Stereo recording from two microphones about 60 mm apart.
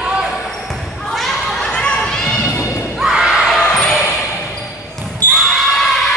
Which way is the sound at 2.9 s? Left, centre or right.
Centre.